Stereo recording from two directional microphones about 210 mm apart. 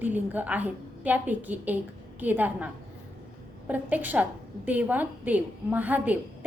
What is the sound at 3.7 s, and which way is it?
A woman's voice, 10° right (ahead or behind).